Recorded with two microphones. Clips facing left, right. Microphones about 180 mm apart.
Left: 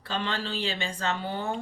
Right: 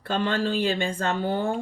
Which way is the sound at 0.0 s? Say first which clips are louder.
Right 7 dB; 50° right (ahead or behind).